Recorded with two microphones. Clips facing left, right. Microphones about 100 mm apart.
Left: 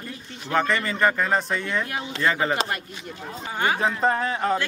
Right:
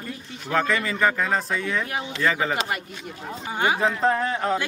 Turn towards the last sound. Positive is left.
turn(degrees=0)  # may be behind; listen again after turning